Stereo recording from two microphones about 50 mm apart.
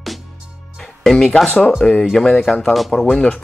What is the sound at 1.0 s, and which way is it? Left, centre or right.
Speech, centre.